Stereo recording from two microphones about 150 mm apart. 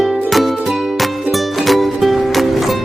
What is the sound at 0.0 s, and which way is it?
Music, centre (ahead or behind).